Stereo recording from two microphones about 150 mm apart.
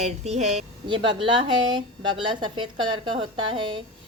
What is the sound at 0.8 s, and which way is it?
A woman's voice, 35° right (ahead or behind).